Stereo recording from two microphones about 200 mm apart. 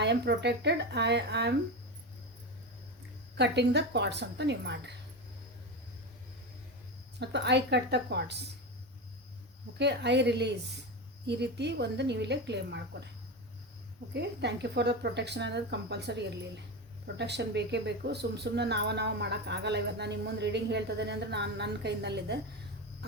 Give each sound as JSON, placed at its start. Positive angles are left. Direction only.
{"t": 0.0, "sound": "speech", "side_deg": -60}
{"t": 3.3, "sound": "speech", "side_deg": -55}
{"t": 7.2, "sound": "speech", "side_deg": -60}
{"t": 9.7, "sound": "speech", "side_deg": -60}
{"t": 14.1, "sound": "speech", "side_deg": -55}